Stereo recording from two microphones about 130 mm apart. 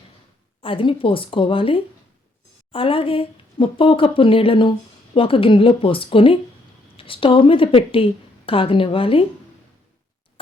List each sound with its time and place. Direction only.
0.6 s a woman's voice: 45° left (ahead or behind)